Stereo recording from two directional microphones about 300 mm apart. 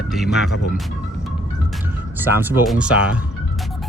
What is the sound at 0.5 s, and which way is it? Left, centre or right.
Speech, left.